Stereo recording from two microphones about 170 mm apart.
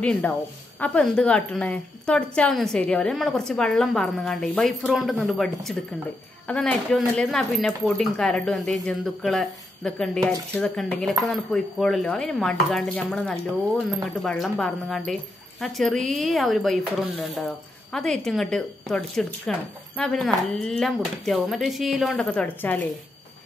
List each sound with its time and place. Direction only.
0.0 s speech: 5° left (ahead or behind)